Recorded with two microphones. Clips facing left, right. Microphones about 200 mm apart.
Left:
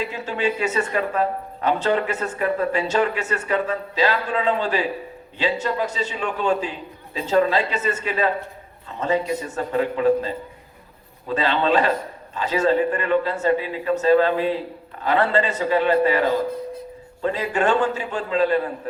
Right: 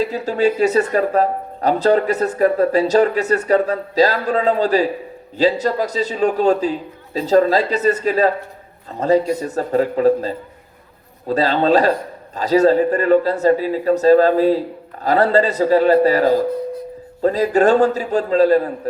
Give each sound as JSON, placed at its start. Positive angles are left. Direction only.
{"t": 0.0, "sound": "speech", "side_deg": -40}